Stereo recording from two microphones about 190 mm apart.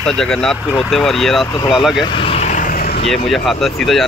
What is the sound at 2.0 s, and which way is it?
Vehicle, 30° left (ahead or behind).